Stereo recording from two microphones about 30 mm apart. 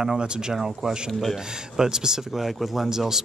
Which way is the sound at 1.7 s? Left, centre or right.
Right.